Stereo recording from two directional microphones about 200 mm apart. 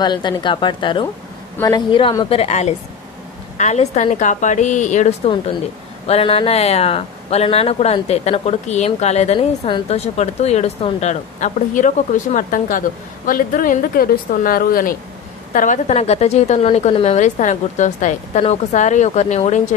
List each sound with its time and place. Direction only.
0.0 s a woman's voice: 20° left (ahead or behind)